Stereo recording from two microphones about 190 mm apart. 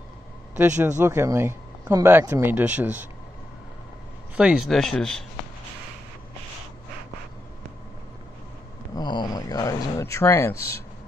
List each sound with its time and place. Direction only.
0.6 s speech: 15° right (ahead or behind)
4.4 s speech: 5° right (ahead or behind)
8.9 s speech: 20° left (ahead or behind)